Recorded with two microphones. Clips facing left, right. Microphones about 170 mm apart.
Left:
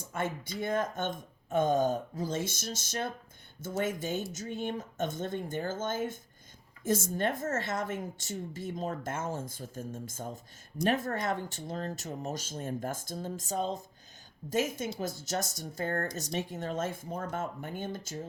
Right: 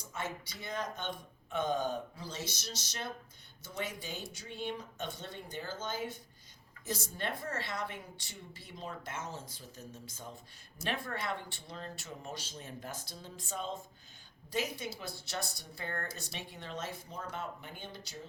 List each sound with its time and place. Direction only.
0.0 s a woman's voice: 50° left (ahead or behind)